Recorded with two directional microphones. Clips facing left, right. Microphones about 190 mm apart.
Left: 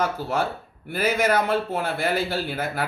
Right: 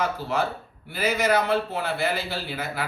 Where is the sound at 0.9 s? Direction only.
50° left (ahead or behind).